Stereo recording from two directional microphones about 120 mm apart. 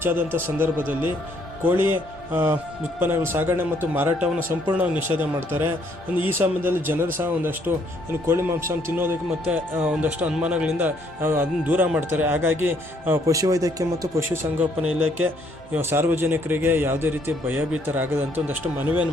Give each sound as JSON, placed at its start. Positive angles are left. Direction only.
{"t": 0.0, "sound": "a man's voice", "side_deg": -20}
{"t": 14.8, "sound": "a man's voice", "side_deg": -10}